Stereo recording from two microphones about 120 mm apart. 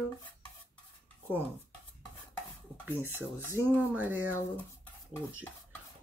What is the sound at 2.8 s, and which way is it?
Speech, 15° right (ahead or behind).